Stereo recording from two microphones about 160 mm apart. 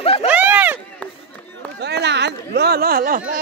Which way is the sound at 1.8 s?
90° right.